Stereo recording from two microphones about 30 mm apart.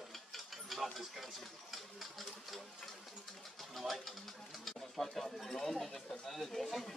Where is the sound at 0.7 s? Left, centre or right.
Centre.